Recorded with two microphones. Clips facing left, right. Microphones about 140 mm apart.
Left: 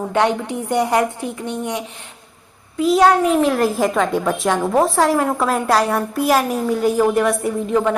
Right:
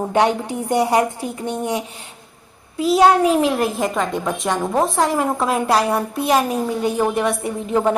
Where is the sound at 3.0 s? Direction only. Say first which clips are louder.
Right 1 dB; 25° right (ahead or behind).